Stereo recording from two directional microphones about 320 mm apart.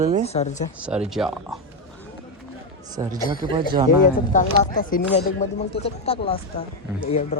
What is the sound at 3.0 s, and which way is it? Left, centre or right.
Speech, centre.